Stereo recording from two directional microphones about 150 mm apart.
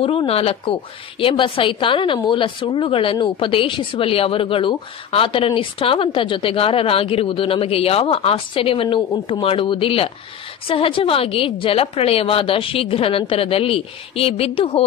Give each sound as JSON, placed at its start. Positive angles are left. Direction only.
{"t": 0.0, "sound": "a woman's voice", "side_deg": 40}